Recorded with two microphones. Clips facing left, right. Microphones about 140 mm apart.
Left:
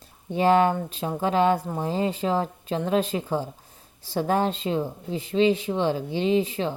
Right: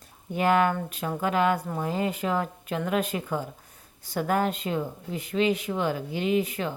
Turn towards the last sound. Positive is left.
turn(degrees=30)  # may be behind; listen again after turning